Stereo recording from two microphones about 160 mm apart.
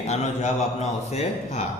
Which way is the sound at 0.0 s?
45° left (ahead or behind).